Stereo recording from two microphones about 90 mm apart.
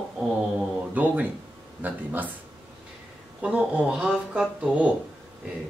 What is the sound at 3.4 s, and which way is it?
Speech, 15° right (ahead or behind).